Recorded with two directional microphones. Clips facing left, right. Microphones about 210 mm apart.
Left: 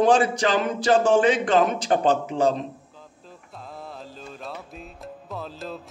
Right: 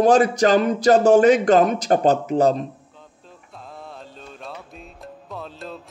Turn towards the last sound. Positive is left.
turn(degrees=0)  # may be behind; listen again after turning